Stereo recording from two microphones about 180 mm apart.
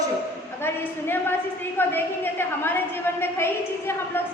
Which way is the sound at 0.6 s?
10° left (ahead or behind).